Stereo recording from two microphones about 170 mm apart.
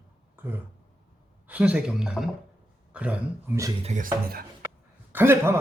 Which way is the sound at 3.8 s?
50° right (ahead or behind).